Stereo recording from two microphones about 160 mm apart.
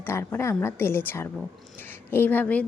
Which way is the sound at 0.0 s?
15° left (ahead or behind).